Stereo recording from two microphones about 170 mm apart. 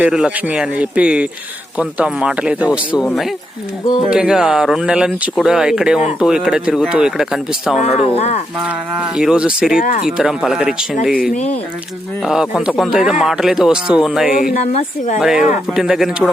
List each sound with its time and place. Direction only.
0.0 s speech: 5° right (ahead or behind)
3.0 s speech: 5° left (ahead or behind)
7.8 s speech: 40° left (ahead or behind)
8.5 s speech: 5° right (ahead or behind)
12.2 s speech: centre (ahead or behind)
14.5 s speech: 40° left (ahead or behind)
15.2 s speech: centre (ahead or behind)